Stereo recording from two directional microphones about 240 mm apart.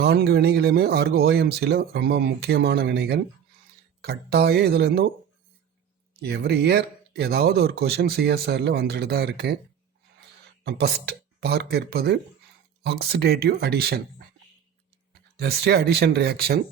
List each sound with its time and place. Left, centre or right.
0.0 s speech: right
6.2 s speech: right
15.4 s speech: right